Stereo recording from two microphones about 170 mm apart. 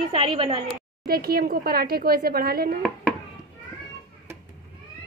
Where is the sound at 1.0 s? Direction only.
65° right (ahead or behind).